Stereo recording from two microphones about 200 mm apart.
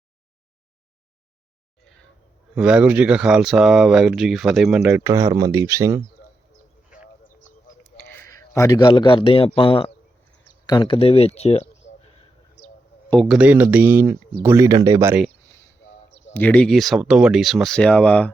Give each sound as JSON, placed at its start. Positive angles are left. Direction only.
{"t": 1.8, "sound": "a sound", "side_deg": 5}
{"t": 2.6, "sound": "speech", "side_deg": -5}
{"t": 8.1, "sound": "a man's voice", "side_deg": 10}
{"t": 13.1, "sound": "speech", "side_deg": 0}
{"t": 16.3, "sound": "speech", "side_deg": 5}